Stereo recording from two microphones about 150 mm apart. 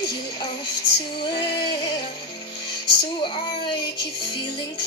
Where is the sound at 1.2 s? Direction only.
35° left (ahead or behind).